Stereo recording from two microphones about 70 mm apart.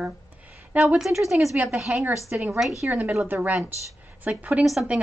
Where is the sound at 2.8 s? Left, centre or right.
Right.